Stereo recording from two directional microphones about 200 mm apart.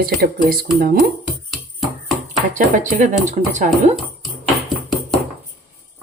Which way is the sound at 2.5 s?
40° right (ahead or behind).